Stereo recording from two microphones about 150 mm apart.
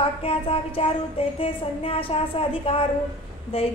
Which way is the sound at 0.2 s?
40° left (ahead or behind).